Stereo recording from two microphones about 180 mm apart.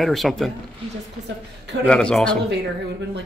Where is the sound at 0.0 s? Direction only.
Centre (ahead or behind).